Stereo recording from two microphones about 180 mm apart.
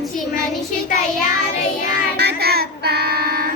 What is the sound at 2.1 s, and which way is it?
Child singing, 65° right (ahead or behind).